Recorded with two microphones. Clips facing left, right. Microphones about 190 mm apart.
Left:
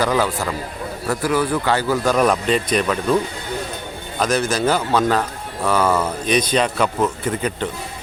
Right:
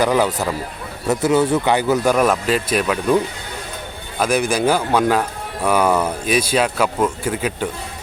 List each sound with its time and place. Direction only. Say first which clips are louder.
0.0 s a man's voice: right 2 dB; 15° right (ahead or behind)
2.1 s speech: even; 5° right (ahead or behind)
4.2 s speech: right 1 dB; 10° right (ahead or behind)